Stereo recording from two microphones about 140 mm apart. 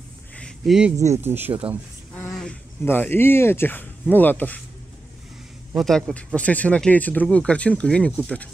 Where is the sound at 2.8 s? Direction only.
15° left (ahead or behind).